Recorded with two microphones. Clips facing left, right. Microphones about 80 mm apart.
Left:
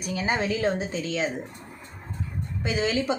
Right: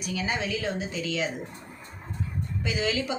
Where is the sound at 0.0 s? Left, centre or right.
Left.